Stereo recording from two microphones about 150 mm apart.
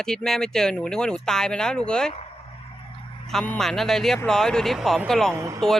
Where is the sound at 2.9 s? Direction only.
35° left (ahead or behind).